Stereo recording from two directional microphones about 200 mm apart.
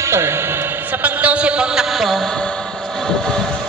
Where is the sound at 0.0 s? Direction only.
15° right (ahead or behind); by 2.5 s 5° left (ahead or behind).